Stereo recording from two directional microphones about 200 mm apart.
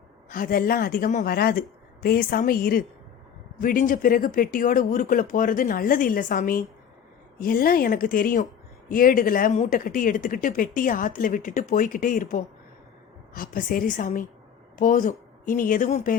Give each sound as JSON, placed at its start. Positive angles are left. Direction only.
{"t": 0.3, "sound": "speech", "side_deg": 45}